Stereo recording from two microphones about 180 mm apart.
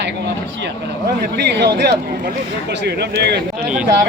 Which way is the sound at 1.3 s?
65° right (ahead or behind).